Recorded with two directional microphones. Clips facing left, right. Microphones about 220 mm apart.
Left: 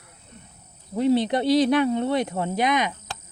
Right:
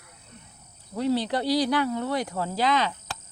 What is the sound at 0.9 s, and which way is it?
Speech, 20° left (ahead or behind).